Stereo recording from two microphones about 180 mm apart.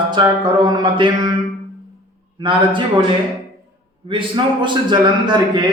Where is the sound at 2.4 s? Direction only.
25° right (ahead or behind).